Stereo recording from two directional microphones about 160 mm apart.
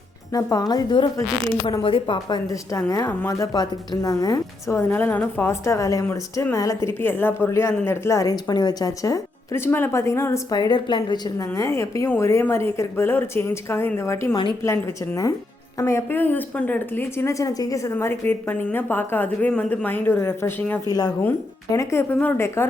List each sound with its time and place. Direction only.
0.3 s a woman's voice: 25° left (ahead or behind)